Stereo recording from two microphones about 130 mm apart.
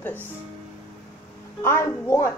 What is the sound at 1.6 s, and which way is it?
Speech, 20° left (ahead or behind).